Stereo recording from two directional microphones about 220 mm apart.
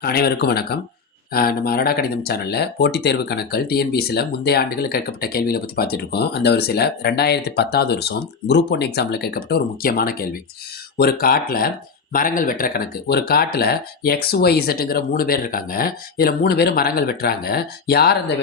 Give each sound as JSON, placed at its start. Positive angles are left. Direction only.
{"t": 0.0, "sound": "speech", "side_deg": 45}